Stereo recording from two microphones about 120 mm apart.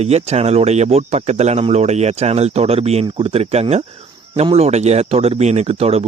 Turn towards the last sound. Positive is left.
turn(degrees=-60)  # may be behind; listen again after turning